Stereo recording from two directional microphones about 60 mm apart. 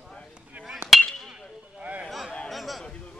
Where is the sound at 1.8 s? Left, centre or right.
Right.